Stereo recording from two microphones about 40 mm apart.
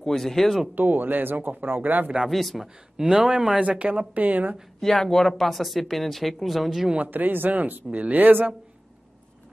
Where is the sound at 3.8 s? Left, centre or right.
Right.